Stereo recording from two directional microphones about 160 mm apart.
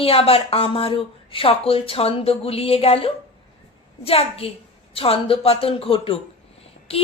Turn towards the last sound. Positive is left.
turn(degrees=35)  # may be behind; listen again after turning